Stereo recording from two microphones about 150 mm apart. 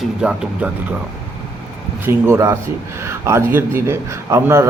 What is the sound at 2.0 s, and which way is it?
A man's voice, 20° right (ahead or behind).